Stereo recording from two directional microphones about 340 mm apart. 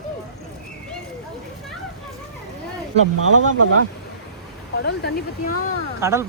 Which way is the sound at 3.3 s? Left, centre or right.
Right.